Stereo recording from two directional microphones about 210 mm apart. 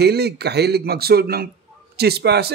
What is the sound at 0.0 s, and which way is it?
Speech, 50° right (ahead or behind).